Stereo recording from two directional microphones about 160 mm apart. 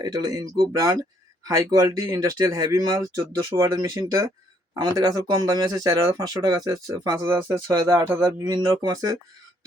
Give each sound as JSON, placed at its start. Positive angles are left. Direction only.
{"t": 0.0, "sound": "speech", "side_deg": -25}